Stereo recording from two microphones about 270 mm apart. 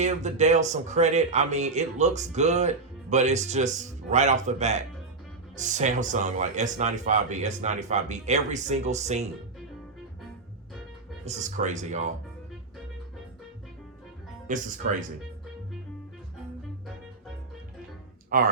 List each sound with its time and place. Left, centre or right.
0.0 s a man's voice: right
11.3 s a man's voice: right
14.4 s a man's voice: right
18.3 s speech: right